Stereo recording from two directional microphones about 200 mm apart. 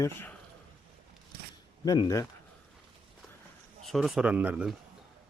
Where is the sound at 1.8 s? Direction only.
20° left (ahead or behind).